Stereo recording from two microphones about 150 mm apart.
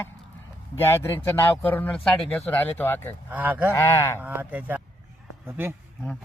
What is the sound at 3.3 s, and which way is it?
Speech, 10° right (ahead or behind).